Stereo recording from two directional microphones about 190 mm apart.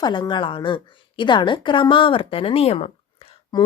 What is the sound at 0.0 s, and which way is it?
A woman's voice, 25° left (ahead or behind).